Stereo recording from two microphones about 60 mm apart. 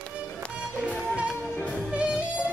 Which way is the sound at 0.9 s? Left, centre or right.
Centre.